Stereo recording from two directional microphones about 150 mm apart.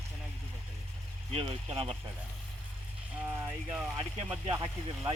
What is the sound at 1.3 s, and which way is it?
Speech, 45° right (ahead or behind).